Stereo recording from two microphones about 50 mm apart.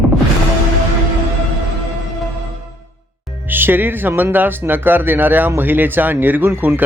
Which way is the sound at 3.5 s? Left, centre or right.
Right.